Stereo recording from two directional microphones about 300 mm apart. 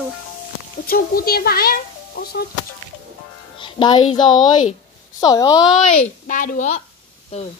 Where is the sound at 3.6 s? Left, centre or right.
Centre.